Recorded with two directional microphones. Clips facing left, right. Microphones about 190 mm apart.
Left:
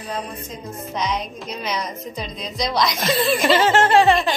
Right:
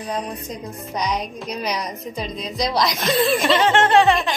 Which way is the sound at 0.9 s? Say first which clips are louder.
Right 1 dB; 40° right (ahead or behind).